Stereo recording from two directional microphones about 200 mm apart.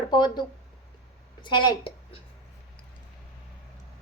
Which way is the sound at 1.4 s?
25° left (ahead or behind).